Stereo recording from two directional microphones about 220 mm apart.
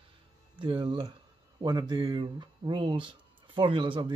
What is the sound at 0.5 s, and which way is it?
Speech, 20° right (ahead or behind).